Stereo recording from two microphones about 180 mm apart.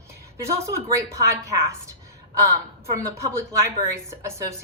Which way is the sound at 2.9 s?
15° right (ahead or behind).